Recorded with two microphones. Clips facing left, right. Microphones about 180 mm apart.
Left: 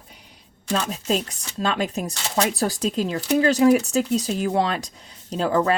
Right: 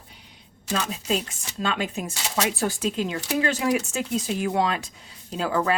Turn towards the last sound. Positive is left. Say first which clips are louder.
# left 4 dB
turn(degrees=40)  # may be behind; listen again after turning